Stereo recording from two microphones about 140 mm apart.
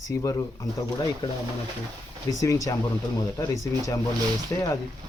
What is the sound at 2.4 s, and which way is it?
Speech, 25° left (ahead or behind).